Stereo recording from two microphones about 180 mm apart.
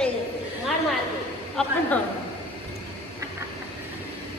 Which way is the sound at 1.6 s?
5° left (ahead or behind).